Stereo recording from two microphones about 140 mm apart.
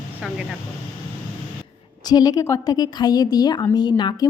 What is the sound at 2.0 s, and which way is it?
A woman's voice, 30° left (ahead or behind).